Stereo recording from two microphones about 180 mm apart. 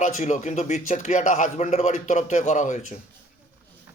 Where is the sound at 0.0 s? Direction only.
45° left (ahead or behind).